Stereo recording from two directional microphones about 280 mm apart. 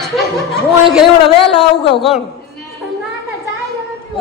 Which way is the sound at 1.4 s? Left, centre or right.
Centre.